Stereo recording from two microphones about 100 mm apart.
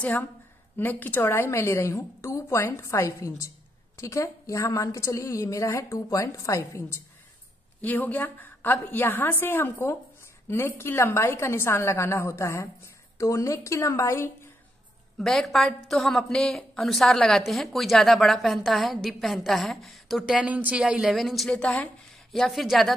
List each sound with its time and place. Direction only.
0.0 s a woman's voice: 15° left (ahead or behind)
7.8 s a woman's voice: 15° left (ahead or behind)
15.1 s a woman's voice: 5° left (ahead or behind)